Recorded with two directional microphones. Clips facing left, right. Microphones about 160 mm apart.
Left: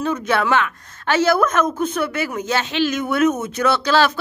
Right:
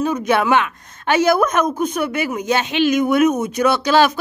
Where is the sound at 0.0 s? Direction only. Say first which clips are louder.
Right 3 dB; 15° right (ahead or behind).